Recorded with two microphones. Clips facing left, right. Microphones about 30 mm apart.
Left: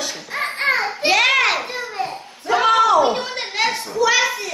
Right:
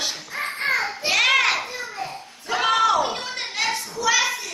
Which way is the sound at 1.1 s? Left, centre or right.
Centre.